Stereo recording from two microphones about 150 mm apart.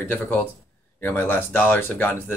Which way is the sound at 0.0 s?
10° left (ahead or behind).